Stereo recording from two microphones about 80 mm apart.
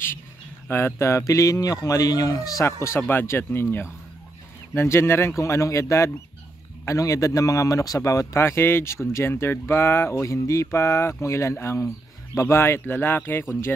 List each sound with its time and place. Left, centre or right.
0.7 s speech: left
2.6 s speech: left